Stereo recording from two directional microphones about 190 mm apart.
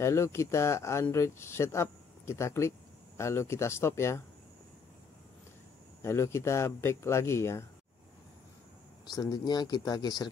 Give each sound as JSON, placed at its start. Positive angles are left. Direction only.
{"t": 0.0, "sound": "speech", "side_deg": 15}
{"t": 6.0, "sound": "speech", "side_deg": 15}
{"t": 9.0, "sound": "speech", "side_deg": 20}